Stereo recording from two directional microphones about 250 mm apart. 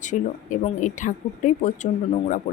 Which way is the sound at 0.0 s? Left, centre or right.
Left.